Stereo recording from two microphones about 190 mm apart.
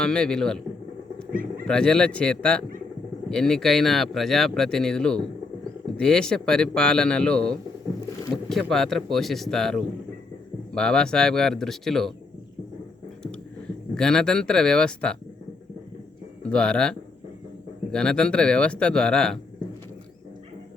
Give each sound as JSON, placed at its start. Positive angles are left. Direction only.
{"t": 0.0, "sound": "speech", "side_deg": 5}
{"t": 1.3, "sound": "speech", "side_deg": -45}
{"t": 1.6, "sound": "speech", "side_deg": 5}
{"t": 8.7, "sound": "speech", "side_deg": 0}
{"t": 13.9, "sound": "speech", "side_deg": 5}
{"t": 16.4, "sound": "speech", "side_deg": 5}